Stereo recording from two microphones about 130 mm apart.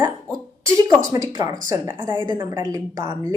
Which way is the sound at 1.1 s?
25° right (ahead or behind).